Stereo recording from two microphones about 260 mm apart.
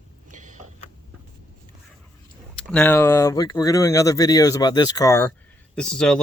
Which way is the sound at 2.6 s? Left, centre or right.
Centre.